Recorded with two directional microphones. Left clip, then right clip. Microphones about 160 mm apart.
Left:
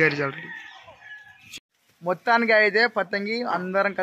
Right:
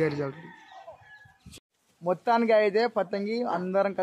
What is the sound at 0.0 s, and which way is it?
Speech, 10° right (ahead or behind).